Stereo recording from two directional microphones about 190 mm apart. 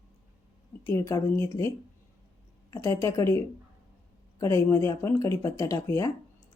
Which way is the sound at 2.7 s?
15° left (ahead or behind).